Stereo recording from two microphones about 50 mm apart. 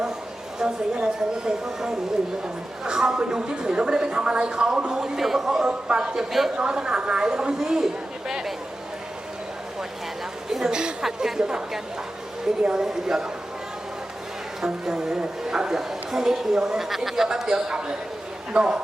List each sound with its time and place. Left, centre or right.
0.6 s speech: centre
10.5 s speech: centre
14.9 s speech: centre